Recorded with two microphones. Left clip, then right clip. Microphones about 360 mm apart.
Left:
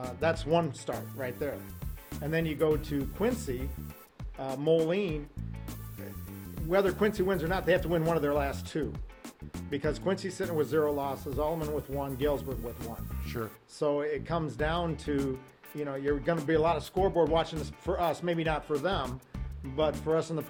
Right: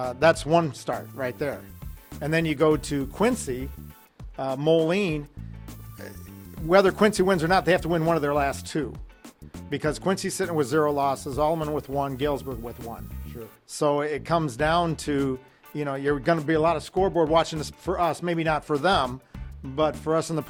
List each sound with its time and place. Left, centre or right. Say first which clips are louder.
0.0 s a man's voice: right 10 dB; right
6.7 s a man's voice: right 8 dB; right
9.2 s music: even; centre
9.6 s a man's voice: right 5 dB; right
13.7 s a man's voice: right 6 dB; right